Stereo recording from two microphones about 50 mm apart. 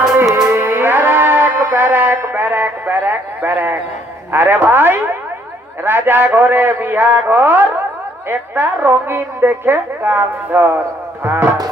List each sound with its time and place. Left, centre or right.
0.4 s music: right
4.3 s a woman's voice: right